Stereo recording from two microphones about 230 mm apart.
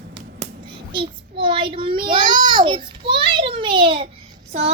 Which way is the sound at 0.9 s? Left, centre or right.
Right.